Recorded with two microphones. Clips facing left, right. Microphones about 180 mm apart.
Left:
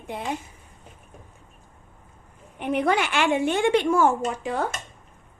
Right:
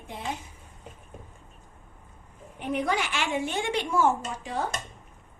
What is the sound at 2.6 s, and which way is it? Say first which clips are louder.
A woman's voice: left 5 dB; 65° left (ahead or behind).